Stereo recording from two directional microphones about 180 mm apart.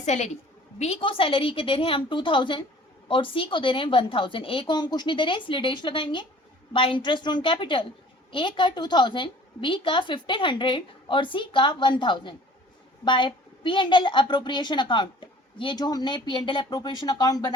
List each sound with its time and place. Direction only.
0.0 s a woman's voice: 40° left (ahead or behind); by 17.5 s 20° left (ahead or behind)